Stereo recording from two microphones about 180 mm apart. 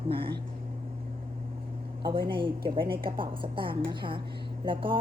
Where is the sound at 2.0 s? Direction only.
25° right (ahead or behind).